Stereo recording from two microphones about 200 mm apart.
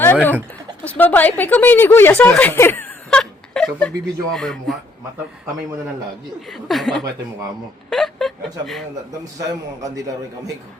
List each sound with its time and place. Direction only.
0.0 s a woman's voice: 10° left (ahead or behind)
6.5 s speech: centre (ahead or behind)
7.9 s a sound: centre (ahead or behind)
9.2 s a man's voice: 15° right (ahead or behind)